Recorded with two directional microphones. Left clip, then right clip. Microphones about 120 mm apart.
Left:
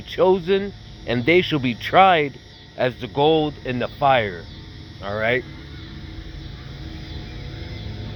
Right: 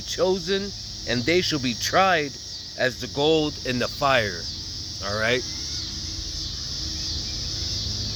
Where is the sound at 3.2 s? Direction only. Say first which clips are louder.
Left 2 dB; 45° right (ahead or behind).